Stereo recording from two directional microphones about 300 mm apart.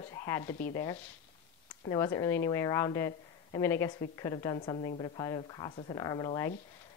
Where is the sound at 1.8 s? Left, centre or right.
Centre.